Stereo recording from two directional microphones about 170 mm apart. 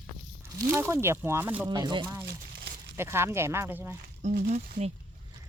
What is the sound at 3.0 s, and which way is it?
Speech, 15° right (ahead or behind).